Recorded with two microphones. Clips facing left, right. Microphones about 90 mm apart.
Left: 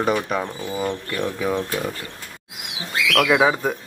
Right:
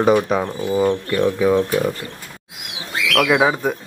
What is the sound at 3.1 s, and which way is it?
Speech, 5° right (ahead or behind).